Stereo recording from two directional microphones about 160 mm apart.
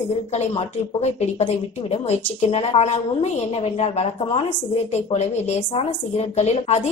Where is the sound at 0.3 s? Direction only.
40° left (ahead or behind).